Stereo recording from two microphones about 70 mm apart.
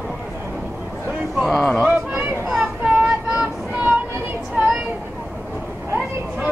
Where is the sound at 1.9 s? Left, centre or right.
Right.